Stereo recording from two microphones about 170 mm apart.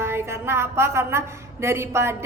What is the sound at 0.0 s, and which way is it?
A woman's voice, 15° right (ahead or behind).